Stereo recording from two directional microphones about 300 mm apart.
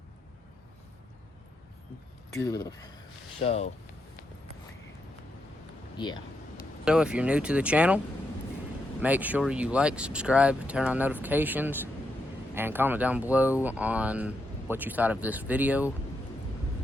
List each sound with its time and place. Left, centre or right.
2.3 s speech: centre
6.0 s a sound: centre
6.8 s speech: centre